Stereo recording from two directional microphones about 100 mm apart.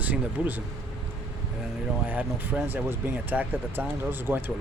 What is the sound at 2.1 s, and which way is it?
Speech, 15° right (ahead or behind).